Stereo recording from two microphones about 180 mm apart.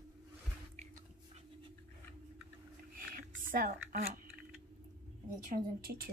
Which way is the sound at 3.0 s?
50° right (ahead or behind).